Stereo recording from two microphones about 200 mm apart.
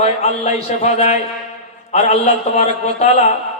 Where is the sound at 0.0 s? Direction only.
30° left (ahead or behind).